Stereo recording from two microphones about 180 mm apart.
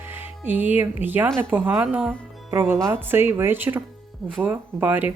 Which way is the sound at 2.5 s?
15° right (ahead or behind).